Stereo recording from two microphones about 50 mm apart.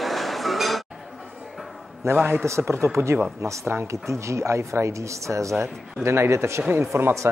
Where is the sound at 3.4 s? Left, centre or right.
Right.